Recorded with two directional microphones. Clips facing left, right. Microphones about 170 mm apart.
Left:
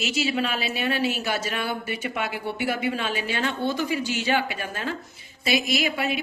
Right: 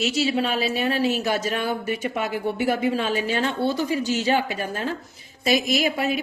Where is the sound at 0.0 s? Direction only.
35° right (ahead or behind).